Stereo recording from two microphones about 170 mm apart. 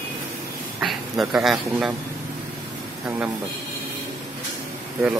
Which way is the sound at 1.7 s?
10° right (ahead or behind).